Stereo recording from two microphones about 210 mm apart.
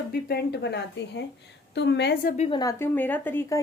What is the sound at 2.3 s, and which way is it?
Speech, 30° left (ahead or behind).